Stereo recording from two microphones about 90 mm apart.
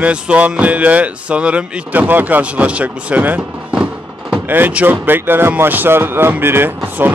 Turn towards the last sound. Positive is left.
turn(degrees=-20)  # may be behind; listen again after turning